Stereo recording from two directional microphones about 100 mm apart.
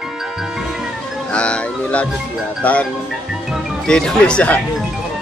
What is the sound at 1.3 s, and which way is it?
Music, 10° left (ahead or behind).